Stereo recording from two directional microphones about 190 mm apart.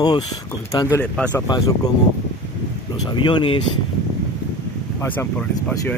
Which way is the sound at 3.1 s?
25° left (ahead or behind).